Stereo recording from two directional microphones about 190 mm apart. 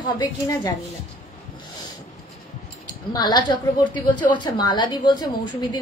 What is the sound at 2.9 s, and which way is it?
A woman's voice, 20° left (ahead or behind).